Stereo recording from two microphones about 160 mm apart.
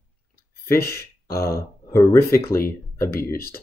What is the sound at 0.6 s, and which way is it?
Speech, 15° left (ahead or behind).